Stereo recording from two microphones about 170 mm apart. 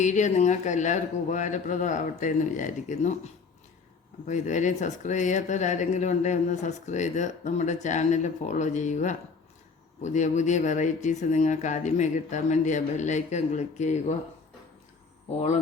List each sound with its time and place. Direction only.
0.0 s speech: 45° left (ahead or behind)
4.3 s speech: 45° left (ahead or behind)